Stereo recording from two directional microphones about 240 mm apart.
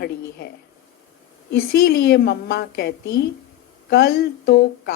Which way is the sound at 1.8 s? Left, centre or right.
Left.